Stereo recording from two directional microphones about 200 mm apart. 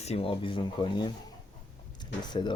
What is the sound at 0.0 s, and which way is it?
Speech, 30° left (ahead or behind).